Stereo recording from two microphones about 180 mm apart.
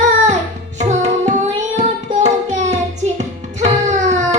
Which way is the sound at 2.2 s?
40° right (ahead or behind).